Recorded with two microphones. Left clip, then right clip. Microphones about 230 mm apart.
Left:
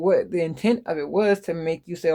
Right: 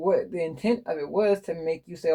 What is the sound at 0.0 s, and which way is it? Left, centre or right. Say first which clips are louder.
Speech: left 4 dB; left.